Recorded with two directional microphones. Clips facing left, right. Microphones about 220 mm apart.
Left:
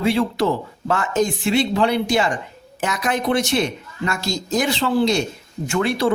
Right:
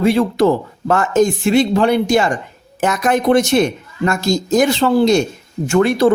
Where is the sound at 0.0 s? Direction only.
45° right (ahead or behind).